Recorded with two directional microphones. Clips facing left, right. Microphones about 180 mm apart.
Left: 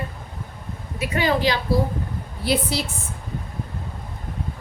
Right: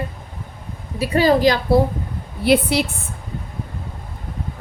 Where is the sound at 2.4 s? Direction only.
60° right (ahead or behind).